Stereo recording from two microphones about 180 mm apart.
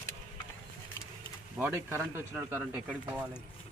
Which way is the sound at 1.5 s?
10° right (ahead or behind).